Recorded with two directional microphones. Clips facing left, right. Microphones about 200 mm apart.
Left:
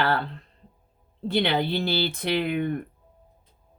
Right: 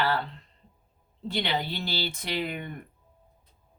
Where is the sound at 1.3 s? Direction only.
55° left (ahead or behind).